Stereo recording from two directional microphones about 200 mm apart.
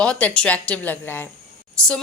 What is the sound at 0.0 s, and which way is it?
A woman's voice, 5° left (ahead or behind).